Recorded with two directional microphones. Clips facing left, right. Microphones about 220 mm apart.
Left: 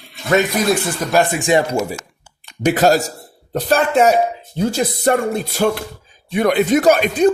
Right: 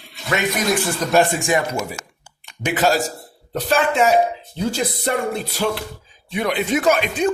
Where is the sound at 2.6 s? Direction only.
40° left (ahead or behind).